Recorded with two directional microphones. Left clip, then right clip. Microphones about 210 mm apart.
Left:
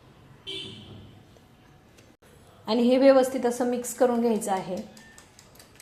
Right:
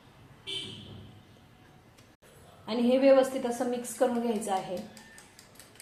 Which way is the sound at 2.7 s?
50° left (ahead or behind).